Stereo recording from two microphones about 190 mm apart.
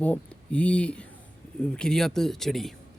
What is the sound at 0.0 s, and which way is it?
Speech, 5° left (ahead or behind).